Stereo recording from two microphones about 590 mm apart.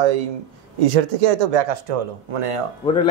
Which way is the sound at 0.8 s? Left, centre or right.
Right.